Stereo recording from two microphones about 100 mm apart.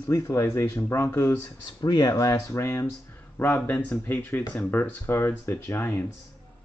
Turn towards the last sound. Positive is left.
turn(degrees=20)  # may be behind; listen again after turning